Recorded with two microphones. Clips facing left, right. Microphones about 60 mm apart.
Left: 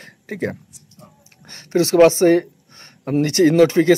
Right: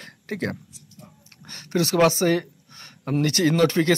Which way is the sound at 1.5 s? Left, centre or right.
Left.